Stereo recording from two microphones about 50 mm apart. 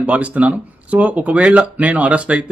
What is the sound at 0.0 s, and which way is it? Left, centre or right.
Speech, right.